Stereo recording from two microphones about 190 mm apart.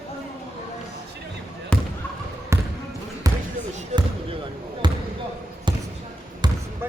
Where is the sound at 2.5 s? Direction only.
15° right (ahead or behind).